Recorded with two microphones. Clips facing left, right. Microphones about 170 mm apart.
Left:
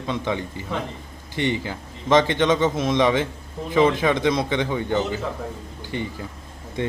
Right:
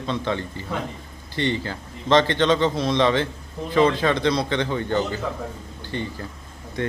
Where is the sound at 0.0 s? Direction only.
15° left (ahead or behind).